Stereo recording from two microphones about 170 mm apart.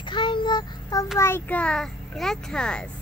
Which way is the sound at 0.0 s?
25° left (ahead or behind).